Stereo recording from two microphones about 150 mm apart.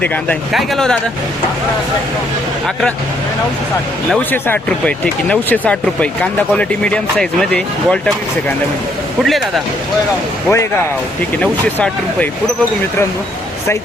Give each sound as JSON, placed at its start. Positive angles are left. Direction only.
{"t": 0.0, "sound": "speech", "side_deg": 10}
{"t": 4.3, "sound": "speech", "side_deg": 15}
{"t": 10.5, "sound": "speech", "side_deg": 20}